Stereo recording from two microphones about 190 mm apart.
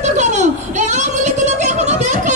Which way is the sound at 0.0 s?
40° right (ahead or behind).